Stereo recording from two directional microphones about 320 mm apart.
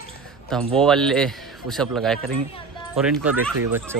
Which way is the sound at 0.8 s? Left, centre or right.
Centre.